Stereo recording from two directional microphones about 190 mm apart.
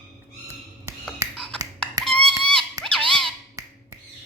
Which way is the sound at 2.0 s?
5° left (ahead or behind).